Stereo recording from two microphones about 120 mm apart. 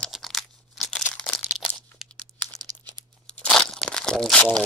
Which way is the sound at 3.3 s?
5° left (ahead or behind).